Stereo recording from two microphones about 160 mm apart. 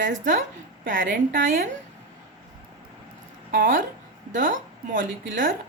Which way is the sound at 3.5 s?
60° right (ahead or behind).